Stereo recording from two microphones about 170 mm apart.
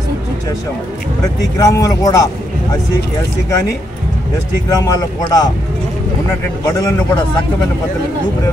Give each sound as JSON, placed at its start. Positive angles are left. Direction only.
{"t": 1.6, "sound": "a man's voice", "side_deg": 20}
{"t": 4.6, "sound": "a man's voice", "side_deg": 20}
{"t": 6.7, "sound": "a man's voice", "side_deg": 20}